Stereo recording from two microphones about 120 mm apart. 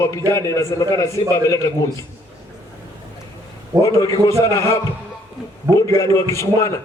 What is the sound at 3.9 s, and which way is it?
A man's voice, 25° left (ahead or behind).